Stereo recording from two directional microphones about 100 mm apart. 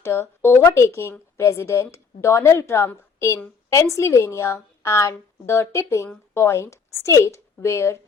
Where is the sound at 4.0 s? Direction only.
25° left (ahead or behind).